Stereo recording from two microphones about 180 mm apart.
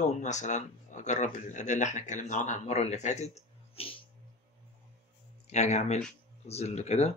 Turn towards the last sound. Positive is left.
turn(degrees=35)  # may be behind; listen again after turning